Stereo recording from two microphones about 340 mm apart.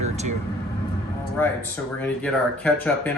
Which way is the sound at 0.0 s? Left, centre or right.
Centre.